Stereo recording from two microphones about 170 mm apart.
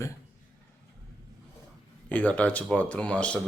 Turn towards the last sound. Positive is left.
turn(degrees=5)  # may be behind; listen again after turning